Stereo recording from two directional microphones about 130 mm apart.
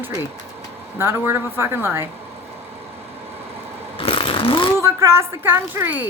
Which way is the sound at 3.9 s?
45° left (ahead or behind).